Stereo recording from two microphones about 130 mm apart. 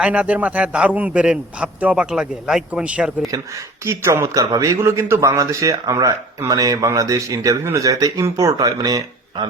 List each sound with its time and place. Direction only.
0.0 s a man's voice: 10° right (ahead or behind)
3.8 s speech: 20° right (ahead or behind)